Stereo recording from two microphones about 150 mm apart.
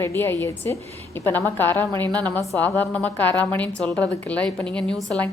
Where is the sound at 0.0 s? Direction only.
15° left (ahead or behind).